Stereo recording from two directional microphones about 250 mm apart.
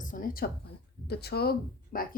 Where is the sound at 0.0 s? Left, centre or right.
Left.